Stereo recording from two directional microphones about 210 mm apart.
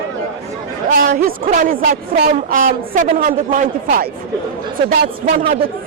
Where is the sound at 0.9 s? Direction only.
45° right (ahead or behind).